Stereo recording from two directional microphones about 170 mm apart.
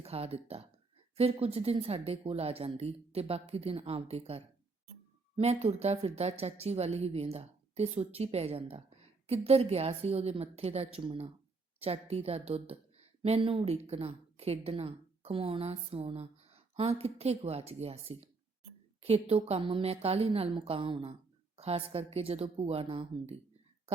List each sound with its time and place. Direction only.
0.0 s a woman's voice: 35° right (ahead or behind)